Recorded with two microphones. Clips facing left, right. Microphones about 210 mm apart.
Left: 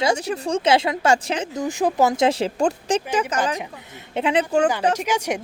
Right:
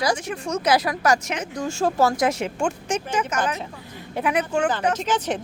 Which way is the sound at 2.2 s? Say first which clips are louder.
Left 3 dB; 30° left (ahead or behind).